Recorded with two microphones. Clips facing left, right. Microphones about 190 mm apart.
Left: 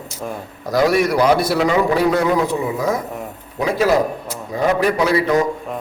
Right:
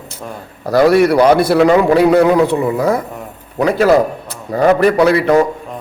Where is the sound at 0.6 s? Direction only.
60° right (ahead or behind).